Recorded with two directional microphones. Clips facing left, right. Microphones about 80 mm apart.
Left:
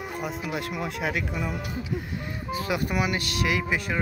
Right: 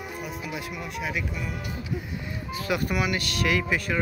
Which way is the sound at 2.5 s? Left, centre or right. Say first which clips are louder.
Even; left.